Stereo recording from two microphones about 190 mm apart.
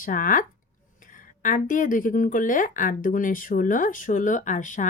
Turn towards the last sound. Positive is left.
turn(degrees=40)  # may be behind; listen again after turning